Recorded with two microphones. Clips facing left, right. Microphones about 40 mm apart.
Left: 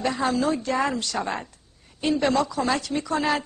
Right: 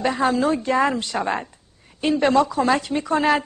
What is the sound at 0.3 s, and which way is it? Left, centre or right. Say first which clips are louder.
A woman's voice: right 4 dB; right.